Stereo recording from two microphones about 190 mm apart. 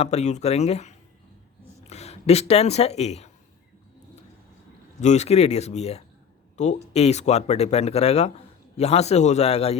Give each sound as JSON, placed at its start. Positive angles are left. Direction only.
{"t": 0.0, "sound": "speech", "side_deg": 35}
{"t": 4.9, "sound": "speech", "side_deg": 35}